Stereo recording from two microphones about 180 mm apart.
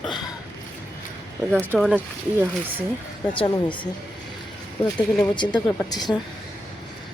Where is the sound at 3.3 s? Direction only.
25° left (ahead or behind).